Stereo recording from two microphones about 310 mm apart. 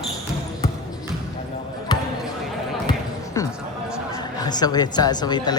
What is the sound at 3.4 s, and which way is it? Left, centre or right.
Music, centre.